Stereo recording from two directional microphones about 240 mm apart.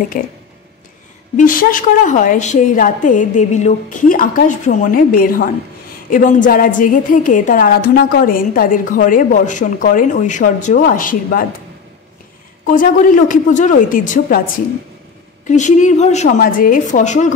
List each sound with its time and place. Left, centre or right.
1.3 s a woman's voice: left
12.6 s a woman's voice: left